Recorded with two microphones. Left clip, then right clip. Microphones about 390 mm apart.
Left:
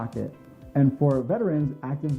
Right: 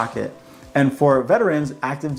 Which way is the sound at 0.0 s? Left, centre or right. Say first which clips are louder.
Right 10 dB; centre.